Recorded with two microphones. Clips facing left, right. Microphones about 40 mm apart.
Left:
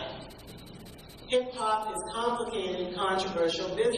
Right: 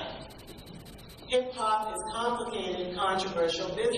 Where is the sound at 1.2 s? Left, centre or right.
Centre.